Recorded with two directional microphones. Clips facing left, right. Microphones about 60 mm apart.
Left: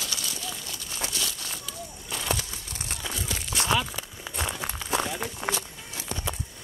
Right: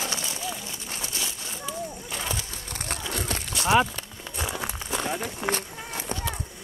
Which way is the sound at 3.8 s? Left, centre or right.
Centre.